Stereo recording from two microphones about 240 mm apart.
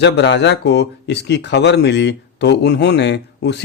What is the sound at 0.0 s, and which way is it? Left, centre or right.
Speech, left.